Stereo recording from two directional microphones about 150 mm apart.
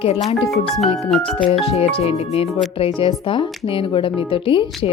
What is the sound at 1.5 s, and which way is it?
Speech, 45° left (ahead or behind).